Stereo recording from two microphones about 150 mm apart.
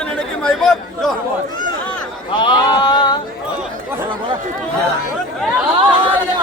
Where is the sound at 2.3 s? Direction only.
30° left (ahead or behind).